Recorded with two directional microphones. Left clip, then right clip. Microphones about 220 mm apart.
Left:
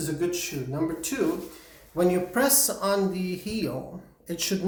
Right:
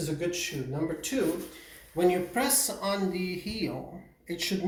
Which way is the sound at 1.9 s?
30° left (ahead or behind).